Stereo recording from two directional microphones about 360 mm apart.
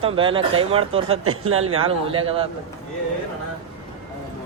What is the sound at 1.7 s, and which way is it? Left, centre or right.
Speech, centre.